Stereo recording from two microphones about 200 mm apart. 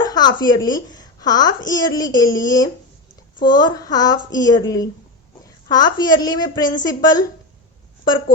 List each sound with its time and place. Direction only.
0.0 s a child's voice: 20° left (ahead or behind)